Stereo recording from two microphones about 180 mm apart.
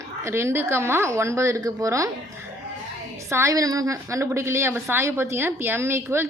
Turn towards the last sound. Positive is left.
turn(degrees=-15)  # may be behind; listen again after turning